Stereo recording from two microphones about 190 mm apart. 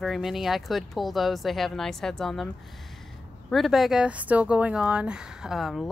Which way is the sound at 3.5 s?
Centre (ahead or behind).